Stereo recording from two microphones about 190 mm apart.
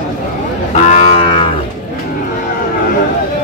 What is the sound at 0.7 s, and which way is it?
Livestock, 35° left (ahead or behind).